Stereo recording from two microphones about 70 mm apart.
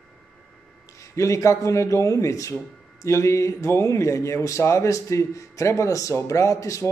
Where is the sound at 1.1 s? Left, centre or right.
Left.